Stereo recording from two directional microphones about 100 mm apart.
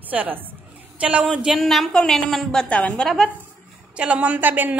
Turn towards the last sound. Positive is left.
turn(degrees=-15)  # may be behind; listen again after turning